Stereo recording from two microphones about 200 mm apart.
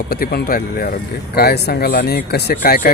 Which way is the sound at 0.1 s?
50° left (ahead or behind).